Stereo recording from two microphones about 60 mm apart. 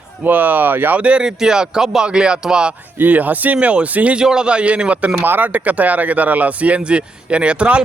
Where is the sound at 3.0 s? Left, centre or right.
Right.